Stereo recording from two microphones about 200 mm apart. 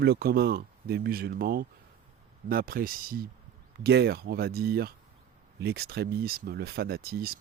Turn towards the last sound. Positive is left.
turn(degrees=-50)  # may be behind; listen again after turning